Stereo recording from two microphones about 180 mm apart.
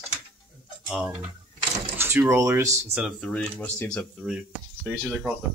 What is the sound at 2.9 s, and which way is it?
Speech, 5° right (ahead or behind).